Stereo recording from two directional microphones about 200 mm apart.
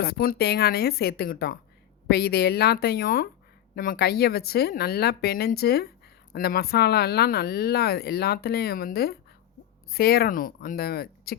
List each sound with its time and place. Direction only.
0.0 s a woman's voice: 50° left (ahead or behind)